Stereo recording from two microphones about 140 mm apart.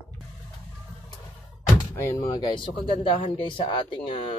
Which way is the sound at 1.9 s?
20° left (ahead or behind).